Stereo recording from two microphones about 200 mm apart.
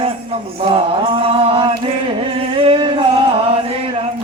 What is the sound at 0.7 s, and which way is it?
Chant, 25° right (ahead or behind).